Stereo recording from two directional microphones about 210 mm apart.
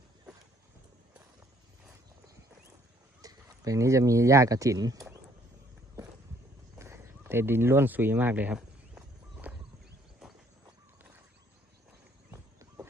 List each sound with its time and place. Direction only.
3.2 s speech: 15° right (ahead or behind)
6.7 s a sound: 15° right (ahead or behind)
12.3 s horse: 10° right (ahead or behind)